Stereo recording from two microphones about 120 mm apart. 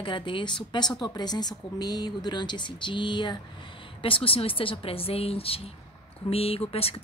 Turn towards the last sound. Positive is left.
turn(degrees=55)  # may be behind; listen again after turning